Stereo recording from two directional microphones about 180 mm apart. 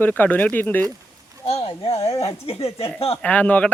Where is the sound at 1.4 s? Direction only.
30° left (ahead or behind).